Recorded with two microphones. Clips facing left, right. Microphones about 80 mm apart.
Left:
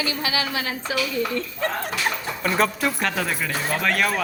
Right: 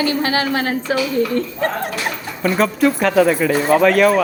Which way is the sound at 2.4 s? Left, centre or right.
Centre.